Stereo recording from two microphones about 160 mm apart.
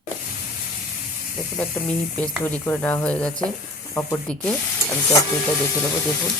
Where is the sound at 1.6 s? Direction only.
10° left (ahead or behind).